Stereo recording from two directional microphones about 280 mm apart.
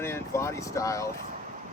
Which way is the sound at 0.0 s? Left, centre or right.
Centre.